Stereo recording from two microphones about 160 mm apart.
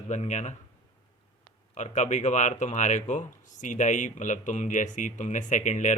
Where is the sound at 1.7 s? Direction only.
50° left (ahead or behind).